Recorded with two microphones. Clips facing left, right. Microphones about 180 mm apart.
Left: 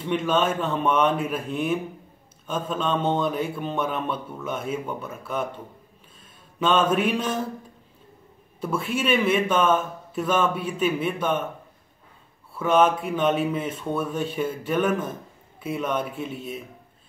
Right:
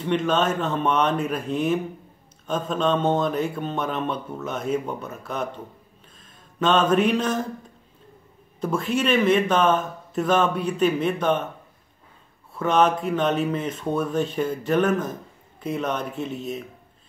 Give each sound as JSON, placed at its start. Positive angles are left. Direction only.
{"t": 0.1, "sound": "speech", "side_deg": 5}
{"t": 6.7, "sound": "speech", "side_deg": 5}
{"t": 8.5, "sound": "speech", "side_deg": 5}
{"t": 12.5, "sound": "speech", "side_deg": 5}